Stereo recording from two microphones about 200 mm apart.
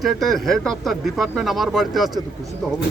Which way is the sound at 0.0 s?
Centre (ahead or behind).